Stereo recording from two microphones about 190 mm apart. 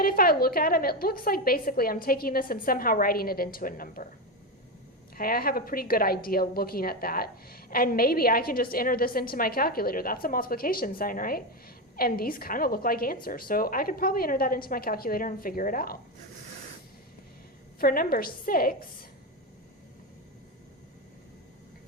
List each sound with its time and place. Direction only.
0.0 s a woman's voice: 50° left (ahead or behind)
5.1 s a woman's voice: 50° left (ahead or behind)
17.7 s a woman's voice: 50° left (ahead or behind)